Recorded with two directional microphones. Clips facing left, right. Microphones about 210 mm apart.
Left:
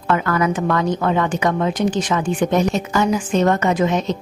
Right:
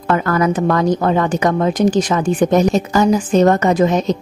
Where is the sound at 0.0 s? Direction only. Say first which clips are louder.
Right 3 dB; 40° right (ahead or behind).